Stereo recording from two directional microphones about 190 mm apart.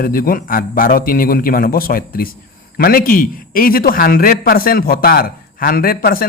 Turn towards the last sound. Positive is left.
turn(degrees=50)  # may be behind; listen again after turning